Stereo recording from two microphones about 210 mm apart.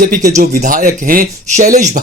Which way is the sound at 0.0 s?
40° right (ahead or behind).